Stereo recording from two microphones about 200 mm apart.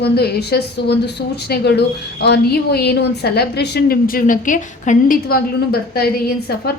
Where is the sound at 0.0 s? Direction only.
55° left (ahead or behind).